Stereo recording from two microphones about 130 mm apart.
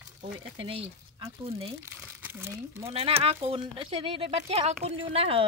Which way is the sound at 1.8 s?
15° right (ahead or behind).